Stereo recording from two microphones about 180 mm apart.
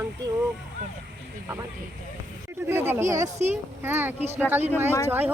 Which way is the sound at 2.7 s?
10° right (ahead or behind).